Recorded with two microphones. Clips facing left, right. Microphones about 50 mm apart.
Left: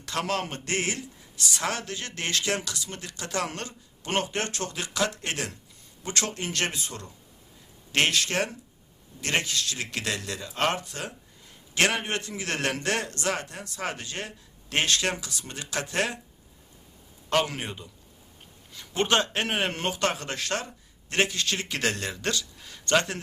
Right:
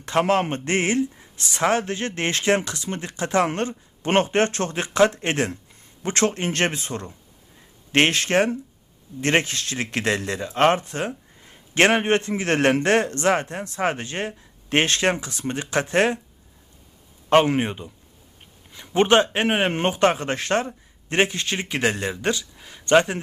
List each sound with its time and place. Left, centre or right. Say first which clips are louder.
0.0 s speech: right 9 dB; right
17.2 s speech: right 9 dB; right